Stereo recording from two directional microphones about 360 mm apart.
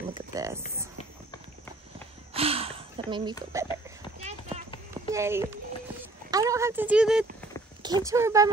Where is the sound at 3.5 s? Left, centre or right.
Centre.